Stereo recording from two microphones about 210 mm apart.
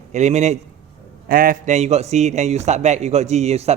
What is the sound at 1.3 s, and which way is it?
A man's voice, 40° right (ahead or behind).